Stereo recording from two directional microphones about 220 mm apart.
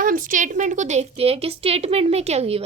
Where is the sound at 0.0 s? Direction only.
40° right (ahead or behind).